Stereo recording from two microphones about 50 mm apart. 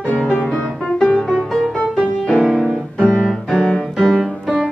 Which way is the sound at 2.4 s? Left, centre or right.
Centre.